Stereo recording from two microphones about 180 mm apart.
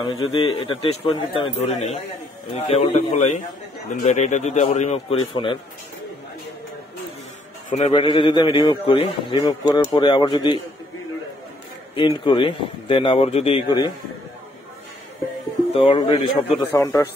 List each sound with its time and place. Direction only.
0.0 s a man's voice: 30° left (ahead or behind)
7.7 s a man's voice: 35° left (ahead or behind)
11.9 s a man's voice: 25° left (ahead or behind)
15.7 s a man's voice: 30° left (ahead or behind)
16.7 s a man's voice: 15° left (ahead or behind)